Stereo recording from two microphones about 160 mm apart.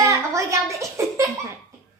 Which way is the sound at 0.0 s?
20° right (ahead or behind).